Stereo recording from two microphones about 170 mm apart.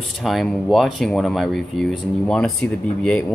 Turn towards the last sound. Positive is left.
turn(degrees=5)  # may be behind; listen again after turning